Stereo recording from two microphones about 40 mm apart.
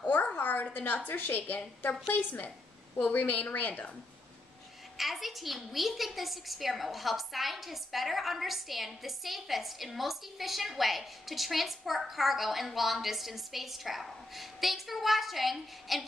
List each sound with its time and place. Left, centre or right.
0.1 s a sound: left
0.7 s a woman's voice: left
4.9 s a woman's voice: centre